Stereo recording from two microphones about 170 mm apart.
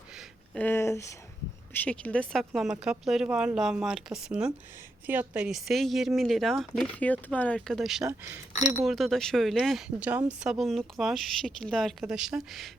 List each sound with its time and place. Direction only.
0.5 s a woman's voice: 10° left (ahead or behind)
8.0 s speech: 15° right (ahead or behind)
8.8 s speech: centre (ahead or behind)